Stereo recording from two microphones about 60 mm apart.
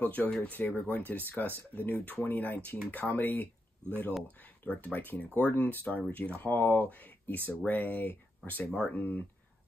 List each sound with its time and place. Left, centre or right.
0.0 s speech: left
8.6 s speech: centre
8.9 s speech: left